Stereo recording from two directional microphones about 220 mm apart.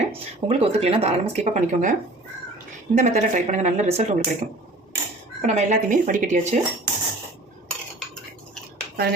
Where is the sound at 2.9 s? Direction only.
35° right (ahead or behind).